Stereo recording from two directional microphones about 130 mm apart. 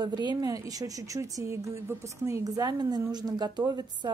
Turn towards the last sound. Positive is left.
turn(degrees=-35)  # may be behind; listen again after turning